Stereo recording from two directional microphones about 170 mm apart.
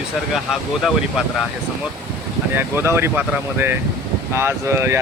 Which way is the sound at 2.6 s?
15° right (ahead or behind).